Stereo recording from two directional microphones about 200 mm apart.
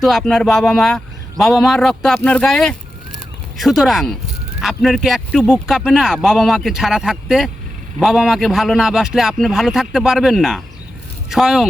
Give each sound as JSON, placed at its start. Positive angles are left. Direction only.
{"t": 0.0, "sound": "speech", "side_deg": 0}